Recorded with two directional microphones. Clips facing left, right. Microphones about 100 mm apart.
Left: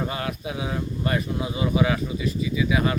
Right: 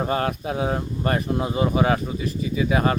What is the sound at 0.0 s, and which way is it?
Speech, 40° right (ahead or behind).